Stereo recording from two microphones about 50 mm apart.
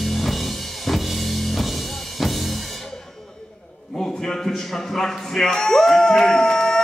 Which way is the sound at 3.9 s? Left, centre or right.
Centre.